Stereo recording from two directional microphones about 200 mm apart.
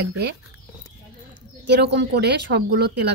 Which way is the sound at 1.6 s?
60° right (ahead or behind).